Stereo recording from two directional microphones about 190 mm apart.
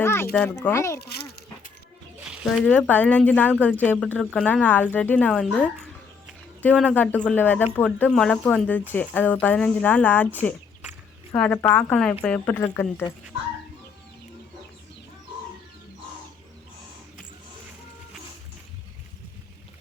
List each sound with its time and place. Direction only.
0.0 s a sound: 10° left (ahead or behind)
0.5 s speech: 15° left (ahead or behind)
1.0 s a sound: 60° left (ahead or behind)
2.2 s zipper: 5° right (ahead or behind)
2.6 s speech: 10° left (ahead or behind)
11.3 s speech: 5° left (ahead or behind)